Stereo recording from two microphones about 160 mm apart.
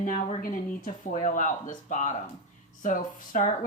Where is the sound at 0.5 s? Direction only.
55° left (ahead or behind).